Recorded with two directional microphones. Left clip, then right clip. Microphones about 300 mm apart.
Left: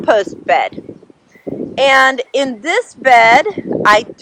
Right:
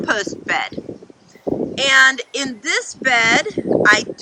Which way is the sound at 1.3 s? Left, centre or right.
Centre.